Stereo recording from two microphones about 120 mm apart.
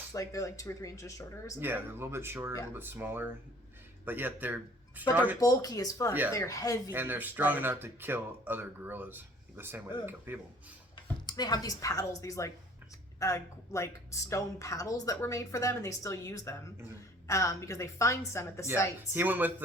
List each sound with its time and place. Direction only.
0.1 s speech: 30° left (ahead or behind)
1.5 s speech: 15° right (ahead or behind)
5.4 s speech: 30° left (ahead or behind)
6.9 s speech: 15° right (ahead or behind)
11.3 s speech: 35° left (ahead or behind)
19.1 s speech: 15° right (ahead or behind)